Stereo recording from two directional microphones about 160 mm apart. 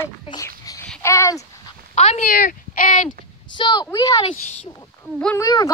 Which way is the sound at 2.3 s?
60° left (ahead or behind).